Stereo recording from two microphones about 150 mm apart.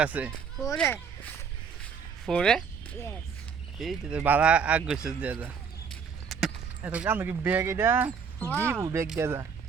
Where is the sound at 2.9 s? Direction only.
15° left (ahead or behind).